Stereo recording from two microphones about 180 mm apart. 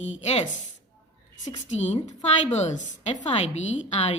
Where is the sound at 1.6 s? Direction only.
40° left (ahead or behind).